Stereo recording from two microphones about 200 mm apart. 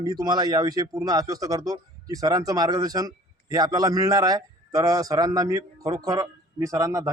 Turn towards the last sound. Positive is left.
turn(degrees=-15)  # may be behind; listen again after turning